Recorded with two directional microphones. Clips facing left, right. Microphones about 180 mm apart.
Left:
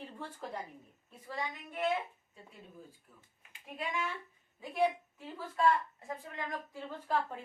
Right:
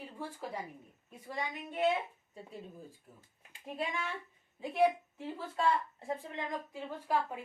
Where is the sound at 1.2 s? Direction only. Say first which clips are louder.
Right 1 dB; 20° right (ahead or behind).